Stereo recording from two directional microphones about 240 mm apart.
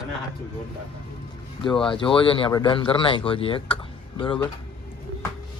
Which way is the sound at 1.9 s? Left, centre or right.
Left.